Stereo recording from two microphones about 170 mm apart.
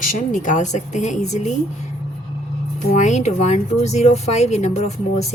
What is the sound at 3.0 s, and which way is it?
Speech, 45° left (ahead or behind).